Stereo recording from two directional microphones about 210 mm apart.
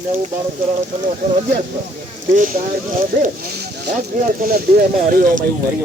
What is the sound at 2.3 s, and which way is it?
Speech, 40° right (ahead or behind).